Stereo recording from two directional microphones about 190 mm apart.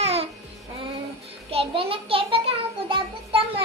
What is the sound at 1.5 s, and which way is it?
Child singing, 30° right (ahead or behind).